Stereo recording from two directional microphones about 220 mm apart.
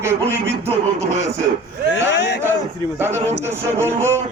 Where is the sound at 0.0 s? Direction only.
10° right (ahead or behind).